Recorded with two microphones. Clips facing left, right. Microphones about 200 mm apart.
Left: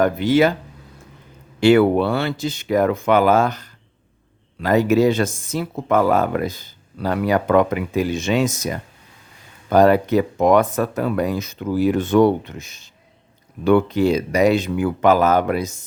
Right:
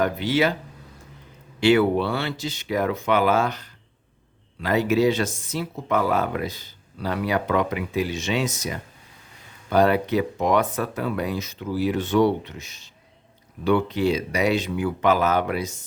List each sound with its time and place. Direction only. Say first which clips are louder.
0.0 s speech: left 6 dB; 50° left (ahead or behind)
1.6 s speech: left 5 dB; 50° left (ahead or behind)